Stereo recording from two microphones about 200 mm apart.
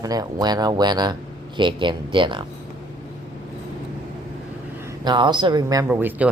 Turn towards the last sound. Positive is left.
turn(degrees=-5)  # may be behind; listen again after turning